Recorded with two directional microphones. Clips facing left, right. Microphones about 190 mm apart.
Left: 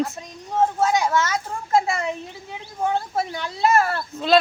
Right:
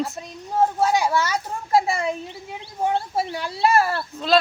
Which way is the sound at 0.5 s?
10° right (ahead or behind).